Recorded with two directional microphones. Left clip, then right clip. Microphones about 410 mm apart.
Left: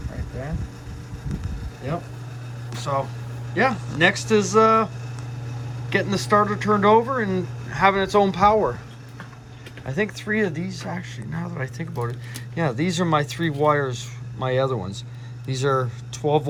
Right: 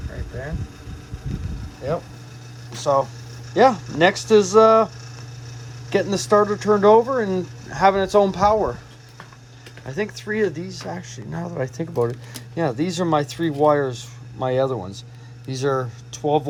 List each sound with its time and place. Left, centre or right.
2.7 s a sound: centre
3.5 s speech: centre
5.9 s speech: centre
9.8 s speech: centre